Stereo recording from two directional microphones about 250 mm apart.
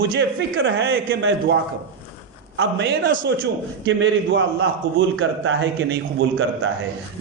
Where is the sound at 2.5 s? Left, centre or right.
Right.